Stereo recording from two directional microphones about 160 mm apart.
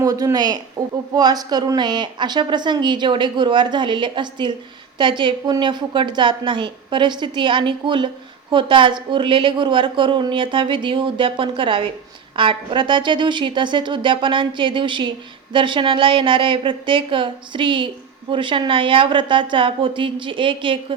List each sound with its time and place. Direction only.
0.0 s a woman's voice: 20° right (ahead or behind)